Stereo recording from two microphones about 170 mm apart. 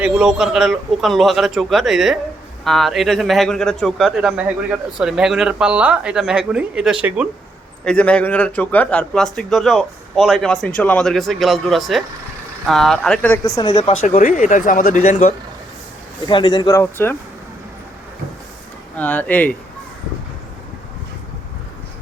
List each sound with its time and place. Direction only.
0.0 s a man's voice: 5° right (ahead or behind)
7.9 s a man's voice: 5° left (ahead or behind)
13.6 s speech: 25° left (ahead or behind)
14.0 s speech: 45° left (ahead or behind)
16.2 s speech: 25° left (ahead or behind)
18.9 s speech: 10° left (ahead or behind)